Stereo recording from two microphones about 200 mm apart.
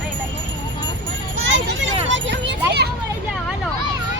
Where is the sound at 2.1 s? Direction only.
60° right (ahead or behind).